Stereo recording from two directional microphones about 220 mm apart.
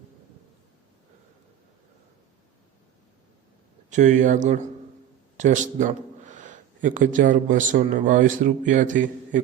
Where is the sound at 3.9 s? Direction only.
35° right (ahead or behind).